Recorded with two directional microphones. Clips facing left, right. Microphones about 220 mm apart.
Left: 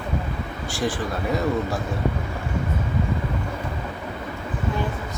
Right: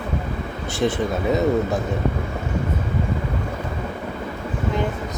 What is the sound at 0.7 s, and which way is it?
Speech, 20° right (ahead or behind).